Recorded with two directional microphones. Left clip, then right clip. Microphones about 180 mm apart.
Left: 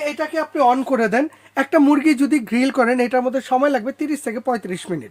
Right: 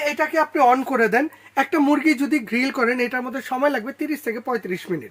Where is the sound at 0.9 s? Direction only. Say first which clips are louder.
Left 1 dB; 60° left (ahead or behind); by 4.9 s 75° left (ahead or behind).